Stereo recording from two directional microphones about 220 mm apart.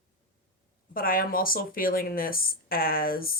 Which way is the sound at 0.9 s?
40° left (ahead or behind).